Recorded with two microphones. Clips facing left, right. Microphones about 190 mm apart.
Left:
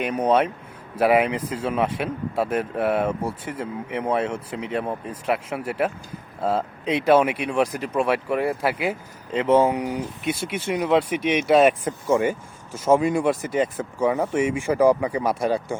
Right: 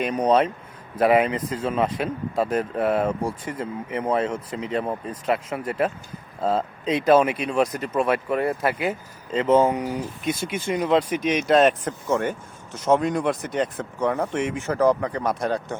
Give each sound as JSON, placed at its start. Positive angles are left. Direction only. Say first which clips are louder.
{"t": 0.0, "sound": "speech", "louder": "right 1 dB", "side_deg": 10}
{"t": 11.2, "sound": "speech", "louder": "left 1 dB", "side_deg": 65}
{"t": 11.4, "sound": "speech", "louder": "left 1 dB", "side_deg": 5}